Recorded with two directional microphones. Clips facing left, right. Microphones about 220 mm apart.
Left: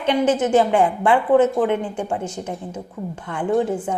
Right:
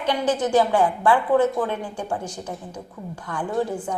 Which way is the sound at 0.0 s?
25° left (ahead or behind).